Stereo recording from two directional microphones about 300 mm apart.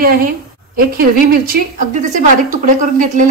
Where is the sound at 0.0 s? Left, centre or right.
Right.